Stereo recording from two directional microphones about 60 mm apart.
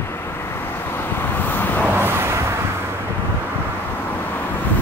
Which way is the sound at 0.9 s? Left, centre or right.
Left.